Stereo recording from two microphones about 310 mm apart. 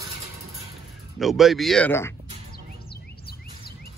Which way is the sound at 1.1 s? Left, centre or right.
Centre.